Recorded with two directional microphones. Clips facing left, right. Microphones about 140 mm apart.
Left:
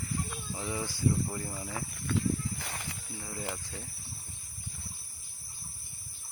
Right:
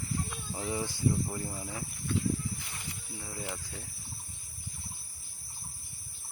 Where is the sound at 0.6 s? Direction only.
20° right (ahead or behind).